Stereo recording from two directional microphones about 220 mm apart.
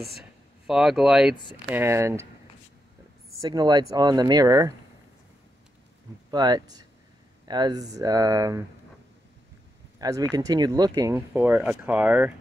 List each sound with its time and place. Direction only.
0.7 s speech: centre (ahead or behind)
3.3 s speech: 20° right (ahead or behind)
6.3 s speech: 20° right (ahead or behind)
9.9 s speech: 15° right (ahead or behind)